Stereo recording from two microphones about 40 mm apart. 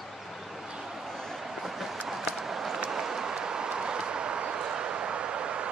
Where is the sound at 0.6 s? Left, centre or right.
Centre.